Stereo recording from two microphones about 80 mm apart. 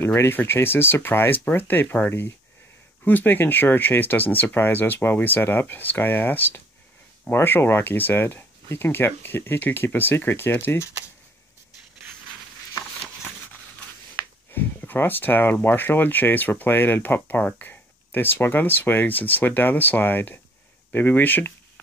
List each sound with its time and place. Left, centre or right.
0.0 s speech: left
14.5 s speech: left